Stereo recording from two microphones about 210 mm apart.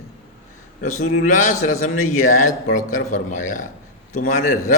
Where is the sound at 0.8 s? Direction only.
40° left (ahead or behind).